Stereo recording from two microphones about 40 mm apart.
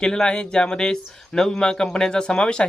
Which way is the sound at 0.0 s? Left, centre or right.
Left.